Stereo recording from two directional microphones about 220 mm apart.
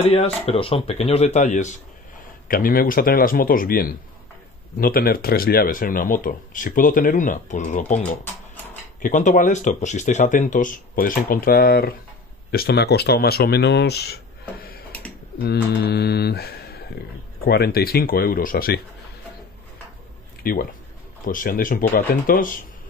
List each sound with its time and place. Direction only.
0.0 s speech: 25° left (ahead or behind)
9.0 s speech: 35° left (ahead or behind)
15.3 s mantra: 45° left (ahead or behind)
17.5 s speech: 45° left (ahead or behind)
20.4 s speech: 40° left (ahead or behind)